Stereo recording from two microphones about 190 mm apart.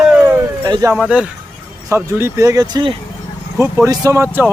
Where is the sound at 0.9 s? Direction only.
5° right (ahead or behind); by 3.0 s 25° right (ahead or behind).